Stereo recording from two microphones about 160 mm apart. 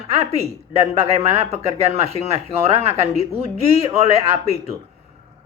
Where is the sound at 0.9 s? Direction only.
40° right (ahead or behind).